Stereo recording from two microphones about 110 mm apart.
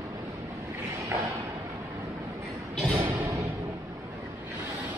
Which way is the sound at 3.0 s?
25° right (ahead or behind).